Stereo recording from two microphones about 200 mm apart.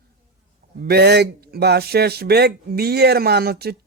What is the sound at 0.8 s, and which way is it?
A man's voice, 55° right (ahead or behind).